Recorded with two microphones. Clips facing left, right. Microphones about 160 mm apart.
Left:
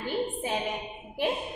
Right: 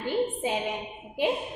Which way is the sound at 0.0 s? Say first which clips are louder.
Right 3 dB; 20° right (ahead or behind).